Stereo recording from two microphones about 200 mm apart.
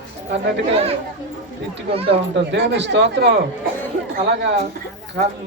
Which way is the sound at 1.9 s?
30° right (ahead or behind).